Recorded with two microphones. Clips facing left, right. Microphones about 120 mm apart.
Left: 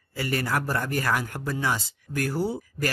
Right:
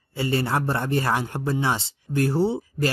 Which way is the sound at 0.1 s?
25° right (ahead or behind).